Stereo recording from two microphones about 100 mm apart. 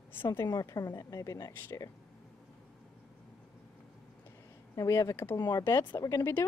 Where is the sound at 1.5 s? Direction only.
25° left (ahead or behind).